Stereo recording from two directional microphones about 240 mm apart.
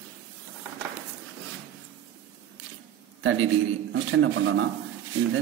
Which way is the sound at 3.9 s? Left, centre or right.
Right.